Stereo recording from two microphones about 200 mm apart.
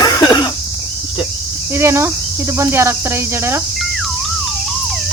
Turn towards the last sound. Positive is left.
turn(degrees=-15)  # may be behind; listen again after turning